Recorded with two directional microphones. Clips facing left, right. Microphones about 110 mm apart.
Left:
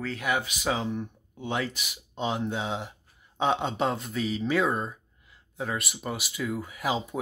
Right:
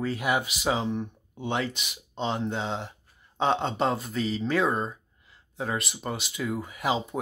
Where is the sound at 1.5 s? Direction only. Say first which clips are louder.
Even; 25° right (ahead or behind).